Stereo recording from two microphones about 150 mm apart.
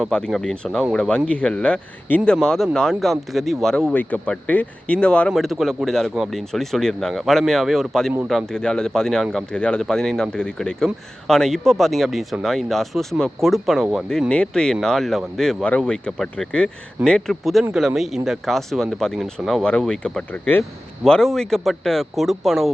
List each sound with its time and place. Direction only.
0.0 s speech: 5° left (ahead or behind)